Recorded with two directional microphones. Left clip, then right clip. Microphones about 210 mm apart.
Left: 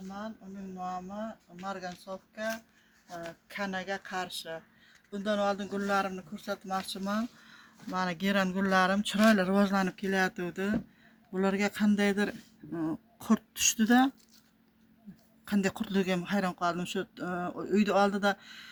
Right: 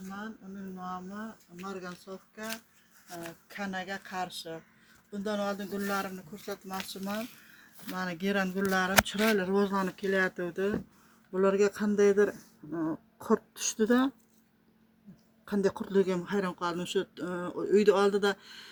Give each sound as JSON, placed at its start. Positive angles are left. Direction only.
{"t": 1.6, "sound": "speech", "side_deg": 35}
{"t": 3.5, "sound": "speech", "side_deg": 50}
{"t": 15.4, "sound": "speech", "side_deg": 55}